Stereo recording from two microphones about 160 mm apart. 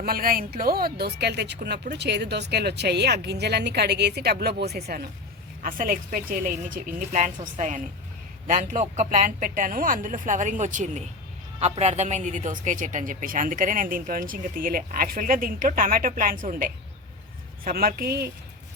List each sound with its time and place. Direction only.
0.0 s speech: 65° right (ahead or behind); by 5.0 s 85° right
5.6 s a man's voice: 60° right (ahead or behind)